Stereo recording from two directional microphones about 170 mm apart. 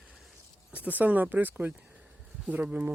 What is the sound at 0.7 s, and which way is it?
Speech, 10° right (ahead or behind).